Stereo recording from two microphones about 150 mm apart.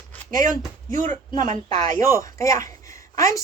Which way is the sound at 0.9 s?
55° right (ahead or behind).